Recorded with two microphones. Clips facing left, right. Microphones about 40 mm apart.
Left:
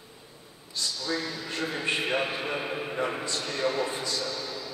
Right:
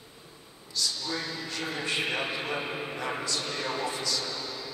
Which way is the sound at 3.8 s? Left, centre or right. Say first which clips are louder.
Even; left.